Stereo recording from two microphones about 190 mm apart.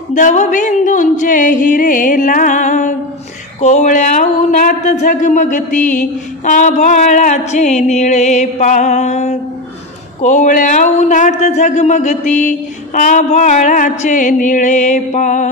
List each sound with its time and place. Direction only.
0.1 s speech: 40° left (ahead or behind)